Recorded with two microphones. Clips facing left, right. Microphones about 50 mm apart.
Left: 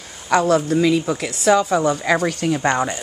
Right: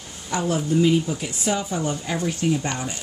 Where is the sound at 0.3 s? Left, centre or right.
Left.